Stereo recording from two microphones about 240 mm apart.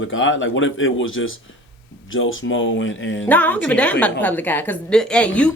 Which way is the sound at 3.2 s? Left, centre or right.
Centre.